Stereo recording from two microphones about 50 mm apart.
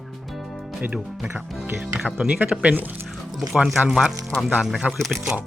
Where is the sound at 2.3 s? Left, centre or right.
Right.